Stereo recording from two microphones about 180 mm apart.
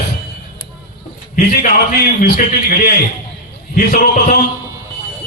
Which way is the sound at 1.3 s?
50° left (ahead or behind).